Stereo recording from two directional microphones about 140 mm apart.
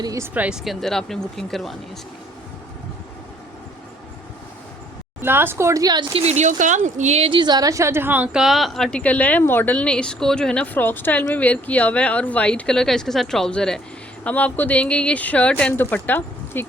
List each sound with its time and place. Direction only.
0.0 s speech: 25° right (ahead or behind)
0.3 s a woman's voice: 5° right (ahead or behind)
5.2 s speech: 15° right (ahead or behind)
6.1 s speech: 50° right (ahead or behind)
7.3 s a woman's voice: 35° right (ahead or behind); by 16.6 s 15° left (ahead or behind)